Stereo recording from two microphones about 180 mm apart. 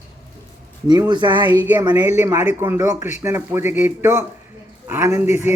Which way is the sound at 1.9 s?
10° right (ahead or behind).